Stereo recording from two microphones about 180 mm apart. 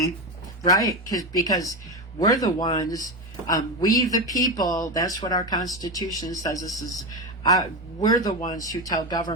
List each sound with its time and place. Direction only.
0.6 s a man's voice: 20° left (ahead or behind)
8.0 s a man's voice: 20° left (ahead or behind)